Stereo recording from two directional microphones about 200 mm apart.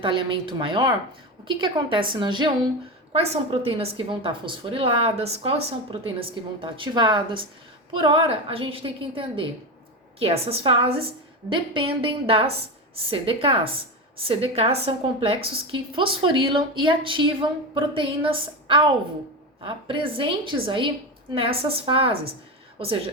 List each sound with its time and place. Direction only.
0.0 s a woman's voice: 25° right (ahead or behind)